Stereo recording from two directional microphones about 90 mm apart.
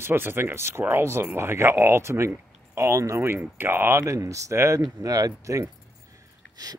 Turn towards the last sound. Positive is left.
turn(degrees=-35)  # may be behind; listen again after turning